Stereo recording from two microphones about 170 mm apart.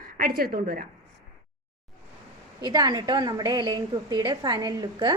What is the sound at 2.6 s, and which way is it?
A woman's voice, 25° right (ahead or behind).